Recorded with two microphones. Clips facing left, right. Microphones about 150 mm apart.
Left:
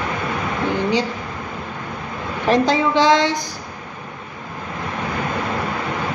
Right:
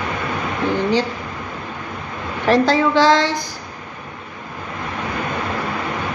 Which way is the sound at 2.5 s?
15° left (ahead or behind).